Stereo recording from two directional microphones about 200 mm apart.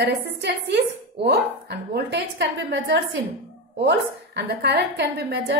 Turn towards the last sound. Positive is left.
turn(degrees=-55)  # may be behind; listen again after turning